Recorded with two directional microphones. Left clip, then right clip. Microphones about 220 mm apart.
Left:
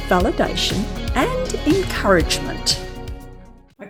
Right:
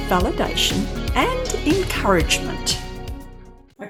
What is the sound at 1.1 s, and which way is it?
Speech, 15° left (ahead or behind).